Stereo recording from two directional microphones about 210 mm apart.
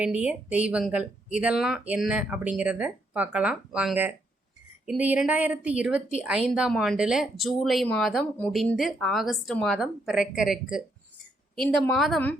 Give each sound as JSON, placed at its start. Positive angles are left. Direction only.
{"t": 0.0, "sound": "a woman's voice", "side_deg": -5}